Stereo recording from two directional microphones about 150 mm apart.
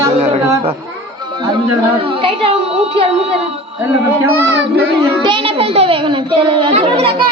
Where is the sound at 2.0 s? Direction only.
35° right (ahead or behind).